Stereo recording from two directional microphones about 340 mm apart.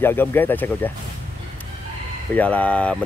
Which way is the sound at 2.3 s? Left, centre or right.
Centre.